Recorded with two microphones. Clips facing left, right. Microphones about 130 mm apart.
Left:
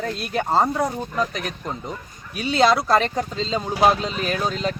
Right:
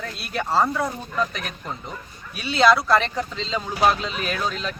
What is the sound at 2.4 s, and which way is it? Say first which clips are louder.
Speech: even; 45° left (ahead or behind).